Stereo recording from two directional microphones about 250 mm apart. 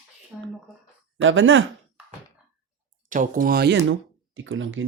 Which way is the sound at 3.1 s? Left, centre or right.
Right.